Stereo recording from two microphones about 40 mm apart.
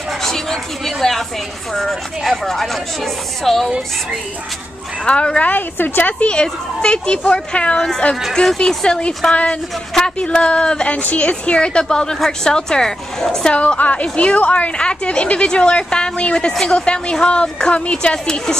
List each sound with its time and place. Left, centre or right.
0.2 s speech: centre
5.0 s a woman's voice: left
5.5 s a woman's voice: left
6.2 s a woman's voice: left
7.7 s speech: centre
8.5 s speech: centre
9.3 s a woman's voice: left; by 13.5 s centre
13.5 s a woman's voice: left
13.7 s a woman's voice: left; by 18.6 s centre